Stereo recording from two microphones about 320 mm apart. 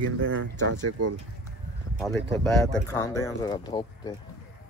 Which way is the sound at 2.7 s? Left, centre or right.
Centre.